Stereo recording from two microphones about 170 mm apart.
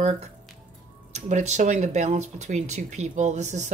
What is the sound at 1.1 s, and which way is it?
Speech, 45° right (ahead or behind).